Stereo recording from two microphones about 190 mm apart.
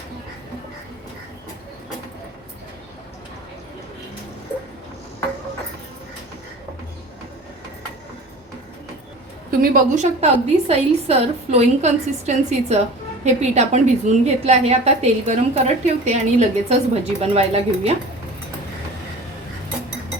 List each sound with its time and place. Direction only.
9.6 s a woman's voice: 45° right (ahead or behind)